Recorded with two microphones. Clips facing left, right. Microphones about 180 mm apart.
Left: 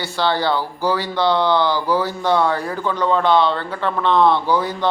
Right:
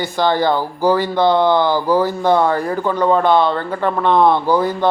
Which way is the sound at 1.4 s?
50° right (ahead or behind).